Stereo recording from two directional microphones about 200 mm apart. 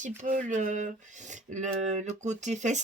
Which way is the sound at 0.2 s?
40° right (ahead or behind).